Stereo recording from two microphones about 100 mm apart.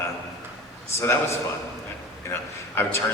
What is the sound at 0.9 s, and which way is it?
A man's voice, 30° left (ahead or behind).